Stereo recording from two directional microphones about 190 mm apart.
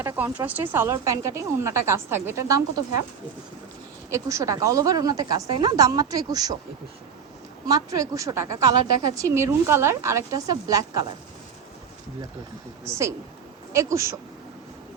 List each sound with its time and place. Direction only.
0.0 s speech: 10° right (ahead or behind)
4.1 s a woman's voice: 15° right (ahead or behind)
7.7 s speech: 15° right (ahead or behind)
12.8 s speech: 15° right (ahead or behind)